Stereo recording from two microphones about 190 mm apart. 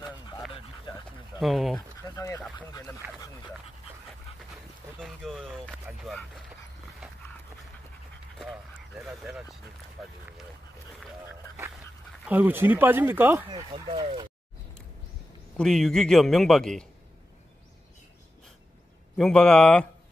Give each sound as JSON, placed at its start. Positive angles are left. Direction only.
{"t": 0.0, "sound": "dog", "side_deg": -5}
{"t": 1.4, "sound": "speech", "side_deg": 0}
{"t": 2.1, "sound": "duck", "side_deg": 20}
{"t": 5.0, "sound": "speech", "side_deg": 0}
{"t": 8.4, "sound": "speech", "side_deg": 0}
{"t": 12.3, "sound": "speech", "side_deg": -10}
{"t": 13.5, "sound": "speech", "side_deg": -25}
{"t": 15.5, "sound": "speech", "side_deg": 0}
{"t": 19.1, "sound": "speech", "side_deg": 5}